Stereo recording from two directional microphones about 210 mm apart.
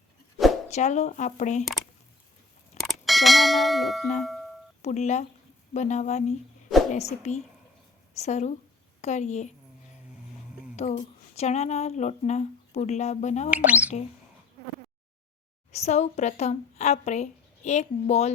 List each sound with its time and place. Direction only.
0.7 s speech: 35° left (ahead or behind)
2.7 s speech: centre (ahead or behind)
4.8 s a woman's voice: 35° left (ahead or behind)
10.8 s speech: 30° left (ahead or behind)
13.5 s speech: 5° right (ahead or behind)
15.7 s speech: 30° left (ahead or behind)